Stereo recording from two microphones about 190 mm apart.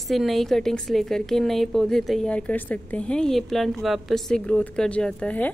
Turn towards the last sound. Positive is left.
turn(degrees=5)  # may be behind; listen again after turning